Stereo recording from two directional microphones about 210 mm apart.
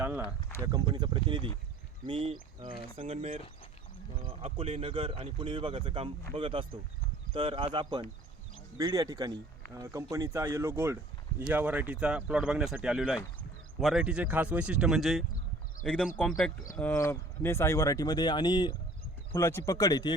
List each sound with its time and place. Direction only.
0.6 s speech: 20° right (ahead or behind); by 20.1 s 20° left (ahead or behind)